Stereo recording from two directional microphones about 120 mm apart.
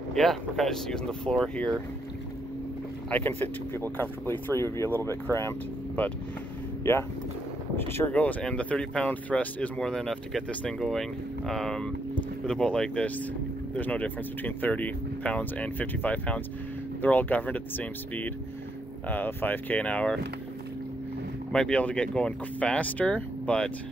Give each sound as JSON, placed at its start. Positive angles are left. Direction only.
{"t": 0.1, "sound": "speech", "side_deg": 0}
{"t": 3.1, "sound": "speech", "side_deg": 15}
{"t": 6.8, "sound": "speech", "side_deg": 20}
{"t": 21.5, "sound": "speech", "side_deg": 5}